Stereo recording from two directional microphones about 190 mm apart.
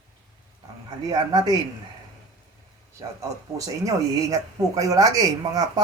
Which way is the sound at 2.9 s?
15° right (ahead or behind).